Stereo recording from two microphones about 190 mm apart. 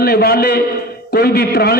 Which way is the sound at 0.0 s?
55° left (ahead or behind).